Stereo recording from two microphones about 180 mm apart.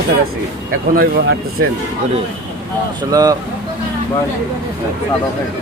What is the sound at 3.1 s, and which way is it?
Speech, 20° right (ahead or behind).